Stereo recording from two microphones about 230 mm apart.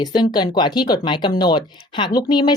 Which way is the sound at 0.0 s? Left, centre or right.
Centre.